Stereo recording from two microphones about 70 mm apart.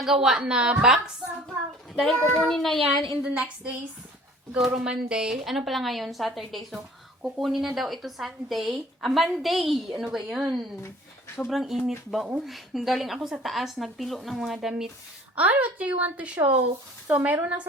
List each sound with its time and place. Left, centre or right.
0.0 s a woman's voice: centre
2.1 s child singing: left
2.5 s speech: centre
3.2 s a woman's voice: centre
15.4 s a woman's voice: right